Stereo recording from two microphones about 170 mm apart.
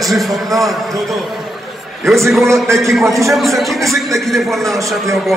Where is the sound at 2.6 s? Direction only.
15° right (ahead or behind).